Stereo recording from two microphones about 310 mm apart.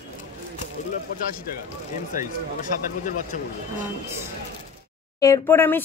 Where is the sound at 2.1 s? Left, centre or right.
Left.